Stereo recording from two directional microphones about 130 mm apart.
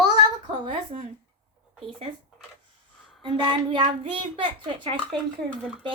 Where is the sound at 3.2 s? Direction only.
40° right (ahead or behind).